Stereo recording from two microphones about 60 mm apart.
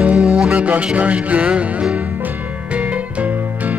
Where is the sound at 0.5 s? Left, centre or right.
Right.